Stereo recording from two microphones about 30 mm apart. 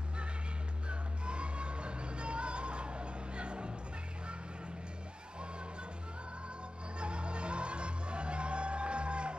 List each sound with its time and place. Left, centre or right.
0.8 s music: right
7.0 s music: right